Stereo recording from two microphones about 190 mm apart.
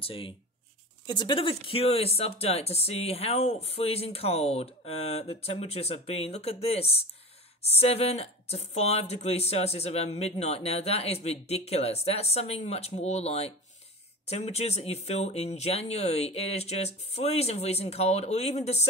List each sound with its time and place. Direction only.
0.0 s speech: 30° left (ahead or behind)